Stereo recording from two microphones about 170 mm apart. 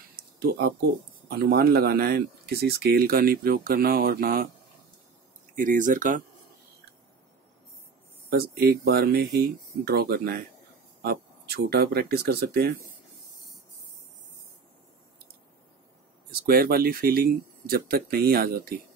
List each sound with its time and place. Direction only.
0.1 s a sound: 65° right (ahead or behind)
1.4 s speech: 70° right (ahead or behind)
5.6 s speech: 50° right (ahead or behind)
8.3 s speech: 65° right (ahead or behind)
16.3 s speech: 60° right (ahead or behind)